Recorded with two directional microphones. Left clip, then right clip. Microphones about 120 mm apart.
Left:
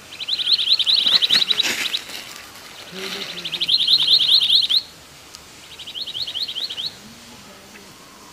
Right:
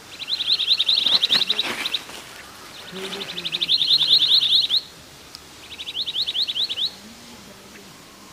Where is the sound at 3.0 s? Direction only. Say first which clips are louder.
Left 2 dB; 35° left (ahead or behind).